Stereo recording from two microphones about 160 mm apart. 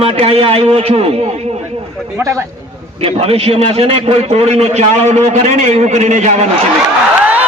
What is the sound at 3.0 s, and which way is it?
A man's voice, 40° right (ahead or behind).